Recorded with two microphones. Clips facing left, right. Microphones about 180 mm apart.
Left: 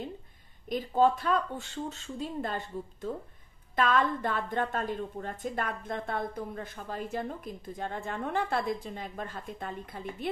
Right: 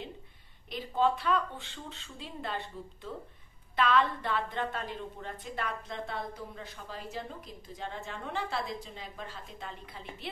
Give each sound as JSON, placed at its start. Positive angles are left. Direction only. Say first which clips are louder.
{"t": 0.7, "sound": "a woman's voice", "louder": "left 4 dB", "side_deg": 45}